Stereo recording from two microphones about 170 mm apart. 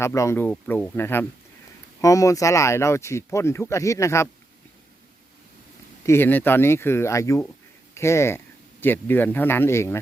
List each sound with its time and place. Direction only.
0.0 s speech: 15° left (ahead or behind)
6.1 s speech: 10° left (ahead or behind)